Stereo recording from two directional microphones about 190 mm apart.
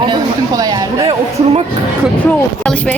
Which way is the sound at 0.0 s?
20° right (ahead or behind).